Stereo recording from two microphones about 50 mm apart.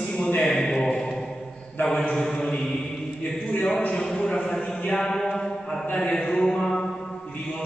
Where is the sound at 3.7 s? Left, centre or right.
Left.